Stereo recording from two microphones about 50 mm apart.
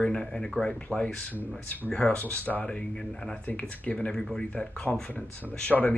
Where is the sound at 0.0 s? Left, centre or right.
Centre.